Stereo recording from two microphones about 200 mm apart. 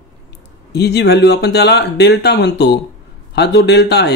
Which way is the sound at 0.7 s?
55° left (ahead or behind).